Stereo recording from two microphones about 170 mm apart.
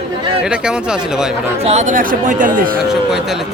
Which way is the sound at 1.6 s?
45° right (ahead or behind).